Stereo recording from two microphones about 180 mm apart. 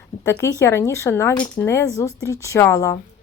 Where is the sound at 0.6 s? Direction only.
15° left (ahead or behind).